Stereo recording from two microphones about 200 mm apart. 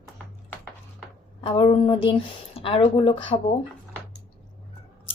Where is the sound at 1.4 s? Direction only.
25° left (ahead or behind).